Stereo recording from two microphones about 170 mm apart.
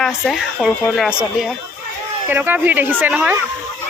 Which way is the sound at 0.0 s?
Centre (ahead or behind).